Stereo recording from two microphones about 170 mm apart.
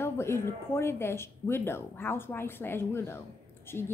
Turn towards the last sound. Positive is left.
turn(degrees=15)  # may be behind; listen again after turning